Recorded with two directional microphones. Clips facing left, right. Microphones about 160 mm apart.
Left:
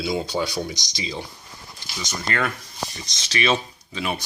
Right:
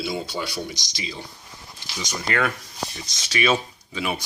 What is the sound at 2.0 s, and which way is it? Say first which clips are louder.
Speech: right 1 dB; 10° right (ahead or behind).